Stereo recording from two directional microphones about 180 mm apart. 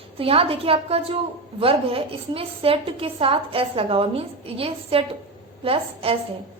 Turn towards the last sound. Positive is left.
turn(degrees=-30)  # may be behind; listen again after turning